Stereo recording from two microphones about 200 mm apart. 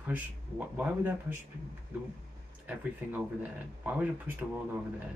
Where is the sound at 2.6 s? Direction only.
10° right (ahead or behind).